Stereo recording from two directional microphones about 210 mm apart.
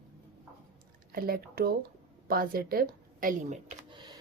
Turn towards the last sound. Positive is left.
turn(degrees=-20)  # may be behind; listen again after turning